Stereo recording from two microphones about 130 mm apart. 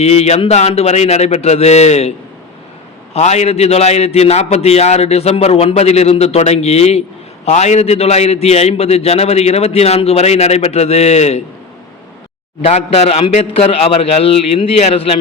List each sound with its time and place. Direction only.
0.0 s a man's voice: 55° left (ahead or behind)
12.6 s a man's voice: 55° left (ahead or behind)